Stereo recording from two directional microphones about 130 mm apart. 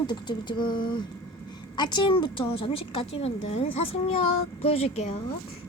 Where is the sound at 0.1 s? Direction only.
35° left (ahead or behind).